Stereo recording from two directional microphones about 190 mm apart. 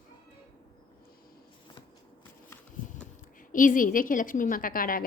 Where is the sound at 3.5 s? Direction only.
45° left (ahead or behind).